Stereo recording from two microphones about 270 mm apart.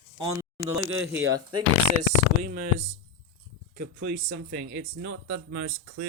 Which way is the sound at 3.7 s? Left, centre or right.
Right.